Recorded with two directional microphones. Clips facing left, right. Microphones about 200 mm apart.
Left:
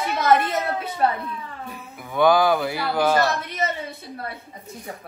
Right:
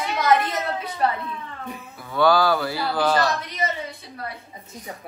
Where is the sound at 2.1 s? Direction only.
15° left (ahead or behind).